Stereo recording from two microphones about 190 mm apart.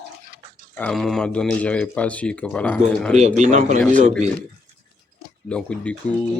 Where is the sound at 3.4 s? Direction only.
40° right (ahead or behind).